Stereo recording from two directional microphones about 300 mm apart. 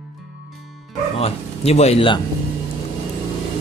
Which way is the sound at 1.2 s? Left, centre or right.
Left.